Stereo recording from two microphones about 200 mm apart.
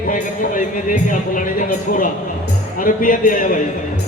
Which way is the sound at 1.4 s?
40° left (ahead or behind).